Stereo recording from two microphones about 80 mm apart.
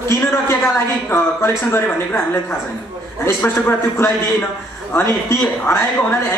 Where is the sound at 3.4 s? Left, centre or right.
Left.